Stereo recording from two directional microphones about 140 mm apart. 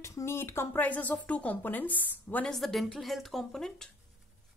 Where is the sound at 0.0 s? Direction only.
20° left (ahead or behind); by 3.9 s 5° left (ahead or behind).